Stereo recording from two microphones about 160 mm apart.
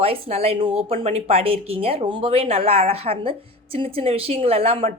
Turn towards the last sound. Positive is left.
turn(degrees=-40)  # may be behind; listen again after turning